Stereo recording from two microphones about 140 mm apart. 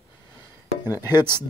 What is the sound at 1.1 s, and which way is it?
Speech, 15° right (ahead or behind).